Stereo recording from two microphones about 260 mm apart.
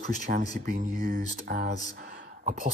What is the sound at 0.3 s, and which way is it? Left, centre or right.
Speech, right.